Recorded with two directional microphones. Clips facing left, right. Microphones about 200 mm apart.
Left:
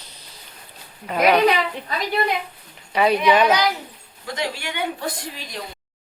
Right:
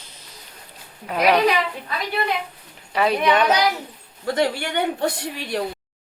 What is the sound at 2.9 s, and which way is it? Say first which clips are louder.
Speech: left 2 dB; centre (ahead or behind).